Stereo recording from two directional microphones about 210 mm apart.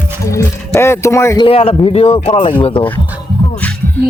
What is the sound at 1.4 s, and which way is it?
Speech, 25° left (ahead or behind).